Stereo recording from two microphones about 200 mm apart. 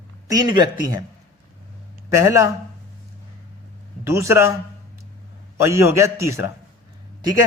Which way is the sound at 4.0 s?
15° right (ahead or behind).